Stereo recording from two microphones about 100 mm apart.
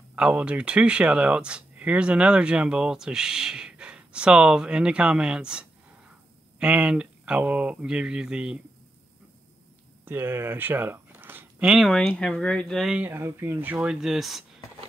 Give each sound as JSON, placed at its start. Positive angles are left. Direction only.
{"t": 0.1, "sound": "speech", "side_deg": -15}
{"t": 10.0, "sound": "speech", "side_deg": -20}
{"t": 11.7, "sound": "speech", "side_deg": 0}
{"t": 12.1, "sound": "speech", "side_deg": 10}
{"t": 12.9, "sound": "speech", "side_deg": -20}